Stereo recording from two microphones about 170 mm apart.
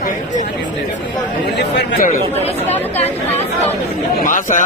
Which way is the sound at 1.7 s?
60° left (ahead or behind).